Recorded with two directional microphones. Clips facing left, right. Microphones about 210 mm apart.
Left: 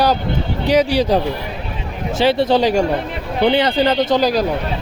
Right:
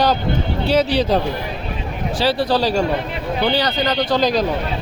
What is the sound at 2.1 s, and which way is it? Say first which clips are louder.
Speech: left 4 dB; 25° left (ahead or behind).